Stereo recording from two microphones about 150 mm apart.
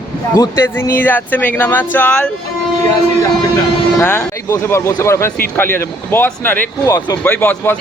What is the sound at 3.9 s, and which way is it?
Speech, 15° left (ahead or behind).